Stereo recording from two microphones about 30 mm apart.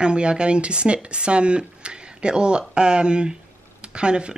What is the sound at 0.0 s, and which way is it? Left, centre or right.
Speech, right.